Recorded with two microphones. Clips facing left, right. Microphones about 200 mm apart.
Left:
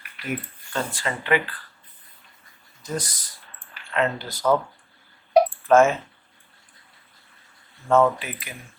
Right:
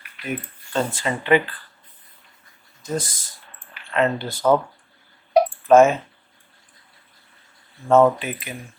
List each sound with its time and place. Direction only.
0.7 s speech: 20° right (ahead or behind)
2.8 s speech: 25° right (ahead or behind)
5.6 s speech: 20° right (ahead or behind)
7.9 s speech: 25° right (ahead or behind)